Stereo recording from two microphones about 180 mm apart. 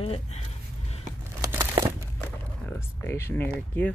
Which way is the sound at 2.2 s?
10° left (ahead or behind).